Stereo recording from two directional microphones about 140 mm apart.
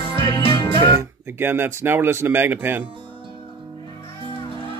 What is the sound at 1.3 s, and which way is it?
Speech, 15° right (ahead or behind).